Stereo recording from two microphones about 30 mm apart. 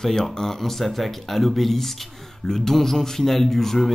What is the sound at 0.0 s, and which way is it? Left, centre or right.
A man's voice, centre.